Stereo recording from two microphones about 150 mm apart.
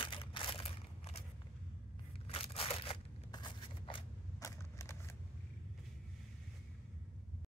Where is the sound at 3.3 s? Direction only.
30° left (ahead or behind).